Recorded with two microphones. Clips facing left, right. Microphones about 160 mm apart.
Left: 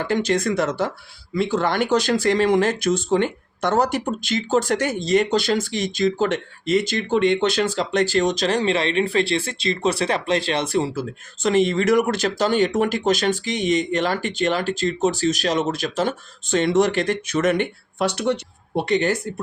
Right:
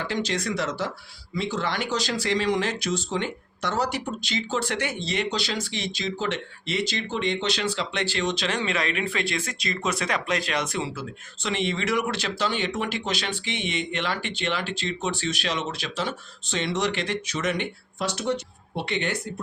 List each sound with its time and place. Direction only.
0.0 s speech: 50° left (ahead or behind)
18.8 s speech: 40° left (ahead or behind)